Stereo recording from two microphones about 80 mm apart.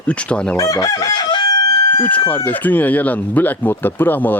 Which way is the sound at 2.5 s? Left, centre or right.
Left.